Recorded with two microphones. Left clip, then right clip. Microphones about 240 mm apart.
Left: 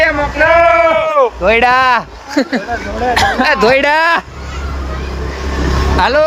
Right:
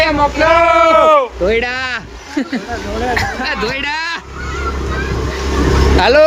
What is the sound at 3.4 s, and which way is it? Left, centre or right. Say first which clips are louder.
Speech: left 8 dB; centre.